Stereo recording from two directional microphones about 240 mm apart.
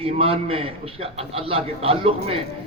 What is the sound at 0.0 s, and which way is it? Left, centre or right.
A man's voice, right.